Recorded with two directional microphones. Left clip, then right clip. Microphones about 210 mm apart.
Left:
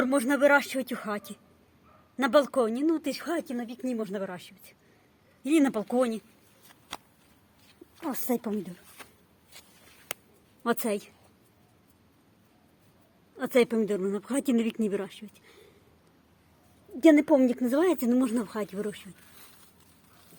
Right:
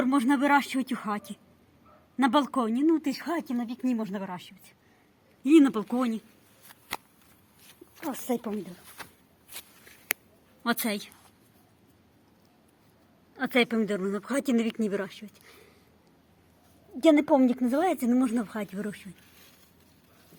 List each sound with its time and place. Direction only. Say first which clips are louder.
0.0 s speech: left 2 dB; centre (ahead or behind)
8.0 s speech: even; 15° left (ahead or behind)
9.5 s a sound: right 6 dB; 55° right (ahead or behind)
10.8 s speech: left 2 dB; 10° left (ahead or behind)
13.3 s speech: left 1 dB; 5° left (ahead or behind)
17.0 s speech: left 1 dB; centre (ahead or behind)